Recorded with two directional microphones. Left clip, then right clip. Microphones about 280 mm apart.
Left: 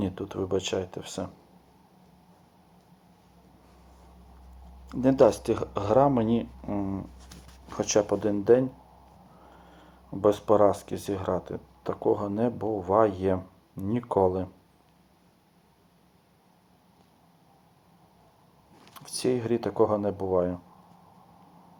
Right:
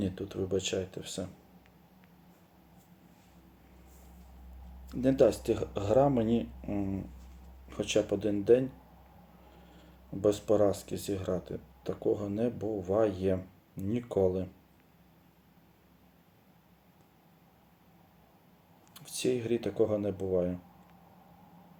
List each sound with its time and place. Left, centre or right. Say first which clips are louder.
0.0 s speech: left 4 dB; centre
4.9 s speech: left 5 dB; centre
6.7 s speech: left 4 dB; left
7.7 s speech: left 5 dB; centre
10.2 s speech: left 5 dB; centre
18.9 s speech: left 4 dB; centre